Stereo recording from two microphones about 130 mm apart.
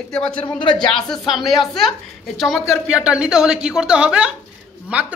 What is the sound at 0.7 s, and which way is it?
A woman's voice, 5° left (ahead or behind).